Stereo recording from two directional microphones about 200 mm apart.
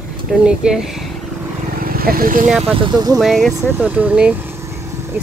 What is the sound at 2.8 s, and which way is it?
Speech, 20° right (ahead or behind).